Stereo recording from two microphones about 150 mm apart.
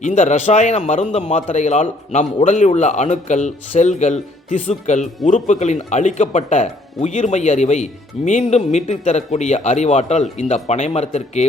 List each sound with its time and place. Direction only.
0.0 s speech: 55° left (ahead or behind)